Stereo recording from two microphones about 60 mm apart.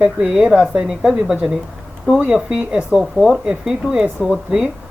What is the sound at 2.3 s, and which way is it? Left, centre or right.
Speech, centre.